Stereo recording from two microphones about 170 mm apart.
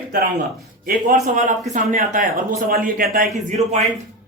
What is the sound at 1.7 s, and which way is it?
Speech, 50° right (ahead or behind).